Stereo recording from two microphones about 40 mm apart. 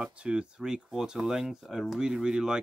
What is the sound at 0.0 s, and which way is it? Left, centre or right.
Speech, right.